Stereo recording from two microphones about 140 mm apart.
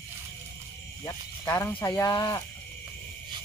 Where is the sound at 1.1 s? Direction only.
20° left (ahead or behind).